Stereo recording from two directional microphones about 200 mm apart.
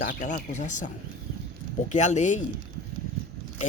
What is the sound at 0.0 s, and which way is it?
Speech, 40° left (ahead or behind).